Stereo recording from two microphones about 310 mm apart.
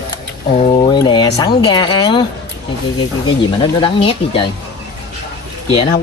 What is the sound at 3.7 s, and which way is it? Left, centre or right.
Speech, centre.